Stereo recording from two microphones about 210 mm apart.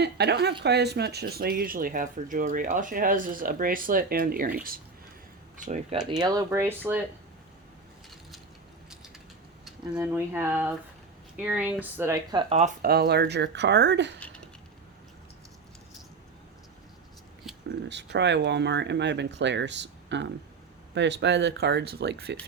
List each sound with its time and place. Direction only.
0.0 s speech: 50° right (ahead or behind); by 6.0 s 35° right (ahead or behind)
6.1 s speech: 20° right (ahead or behind)
9.6 s speech: 5° right (ahead or behind); by 12.7 s 30° right (ahead or behind)
12.8 s speech: 45° right (ahead or behind)
17.5 s a sound: centre (ahead or behind)
17.8 s speech: 55° right (ahead or behind)